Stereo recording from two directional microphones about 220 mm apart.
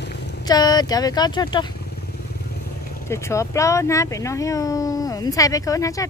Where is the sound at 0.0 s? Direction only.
50° left (ahead or behind).